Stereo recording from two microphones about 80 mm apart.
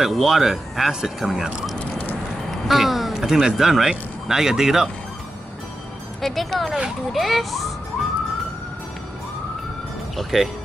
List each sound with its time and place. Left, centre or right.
0.0 s speech: centre
1.8 s a sound: centre
2.7 s speech: centre
6.2 s speech: centre
10.1 s speech: centre